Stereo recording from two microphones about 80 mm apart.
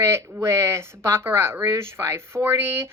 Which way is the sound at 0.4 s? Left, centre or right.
Right.